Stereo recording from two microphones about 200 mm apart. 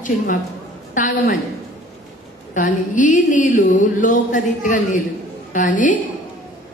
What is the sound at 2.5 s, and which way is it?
A woman's voice, 40° left (ahead or behind).